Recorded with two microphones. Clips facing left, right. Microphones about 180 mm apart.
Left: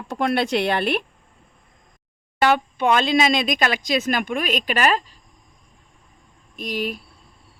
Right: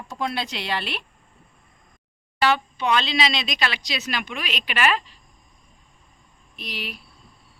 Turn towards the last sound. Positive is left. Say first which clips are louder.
# left 9 dB
turn(degrees=45)  # may be behind; listen again after turning